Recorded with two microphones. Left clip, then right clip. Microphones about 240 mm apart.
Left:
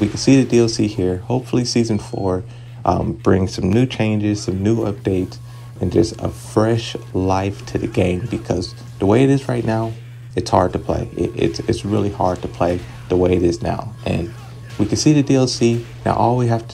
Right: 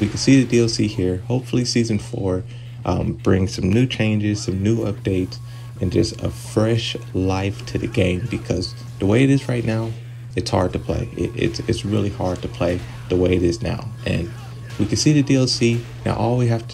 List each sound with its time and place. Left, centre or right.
0.0 s speech: centre
5.9 s speech: left
6.2 s speech: centre